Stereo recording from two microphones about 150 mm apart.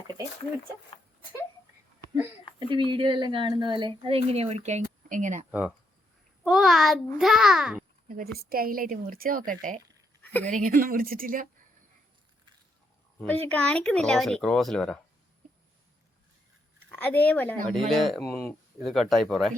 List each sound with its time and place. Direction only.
0.9 s a sound: 35° left (ahead or behind)
2.6 s speech: 30° right (ahead or behind); by 5.5 s 55° right (ahead or behind)
5.5 s speech: 10° right (ahead or behind)
8.0 s speech: 80° right
9.5 s speech: 60° right (ahead or behind)
10.2 s a woman's voice: 10° left (ahead or behind)
10.5 s speech: 65° right (ahead or behind)
13.1 s speech: 10° left (ahead or behind)
16.9 s speech: 10° left (ahead or behind)